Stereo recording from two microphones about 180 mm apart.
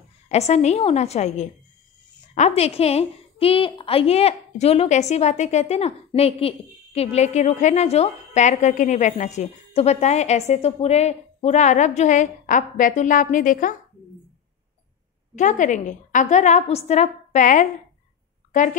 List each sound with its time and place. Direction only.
0.3 s a woman's voice: 35° left (ahead or behind)
15.3 s a woman's voice: 45° left (ahead or behind)